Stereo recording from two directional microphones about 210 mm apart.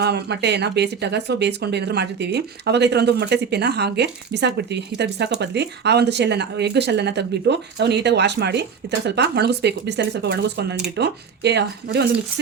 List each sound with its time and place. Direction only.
0.0 s speech: 55° right (ahead or behind)